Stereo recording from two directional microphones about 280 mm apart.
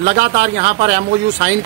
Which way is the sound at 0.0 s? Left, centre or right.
Right.